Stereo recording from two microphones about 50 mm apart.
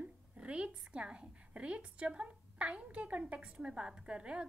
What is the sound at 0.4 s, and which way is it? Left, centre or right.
A woman's voice, right.